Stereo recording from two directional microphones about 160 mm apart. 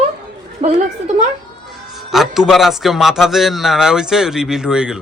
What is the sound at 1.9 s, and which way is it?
A man's voice, centre (ahead or behind).